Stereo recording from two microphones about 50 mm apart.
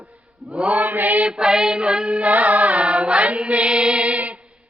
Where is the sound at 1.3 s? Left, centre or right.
Centre.